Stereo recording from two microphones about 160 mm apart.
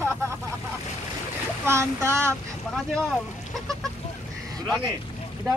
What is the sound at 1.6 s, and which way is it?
Speech, 15° right (ahead or behind).